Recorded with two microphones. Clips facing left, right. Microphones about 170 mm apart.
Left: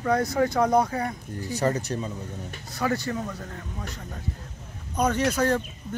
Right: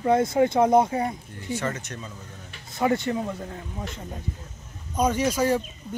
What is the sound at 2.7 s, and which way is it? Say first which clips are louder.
Speech: right 4 dB; 25° right (ahead or behind).